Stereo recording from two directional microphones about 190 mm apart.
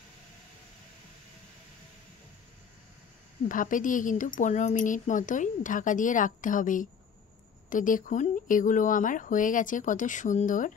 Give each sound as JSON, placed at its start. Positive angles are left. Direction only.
{"t": 3.4, "sound": "speech", "side_deg": 45}